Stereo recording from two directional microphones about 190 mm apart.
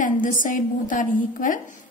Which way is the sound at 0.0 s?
45° left (ahead or behind).